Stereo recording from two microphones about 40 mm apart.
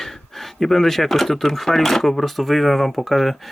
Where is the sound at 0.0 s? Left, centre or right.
Centre.